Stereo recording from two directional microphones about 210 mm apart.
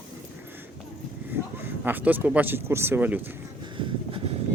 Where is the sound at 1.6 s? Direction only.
10° right (ahead or behind).